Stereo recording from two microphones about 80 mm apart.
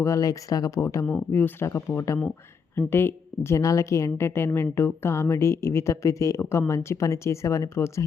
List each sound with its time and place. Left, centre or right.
0.0 s speech: left
0.8 s a woman's voice: left
1.0 s a woman's voice: left